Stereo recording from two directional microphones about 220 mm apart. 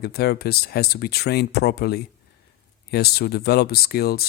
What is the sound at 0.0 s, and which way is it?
Speech, 45° left (ahead or behind).